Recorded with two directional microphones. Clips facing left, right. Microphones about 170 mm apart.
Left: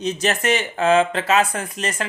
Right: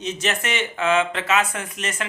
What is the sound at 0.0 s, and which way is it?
Speech, 35° left (ahead or behind).